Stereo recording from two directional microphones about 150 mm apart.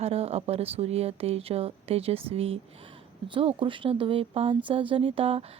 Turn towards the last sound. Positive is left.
turn(degrees=-40)  # may be behind; listen again after turning